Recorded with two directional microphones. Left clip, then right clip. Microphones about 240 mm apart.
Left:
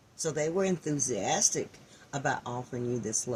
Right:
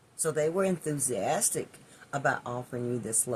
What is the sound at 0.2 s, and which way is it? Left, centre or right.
Speech, right.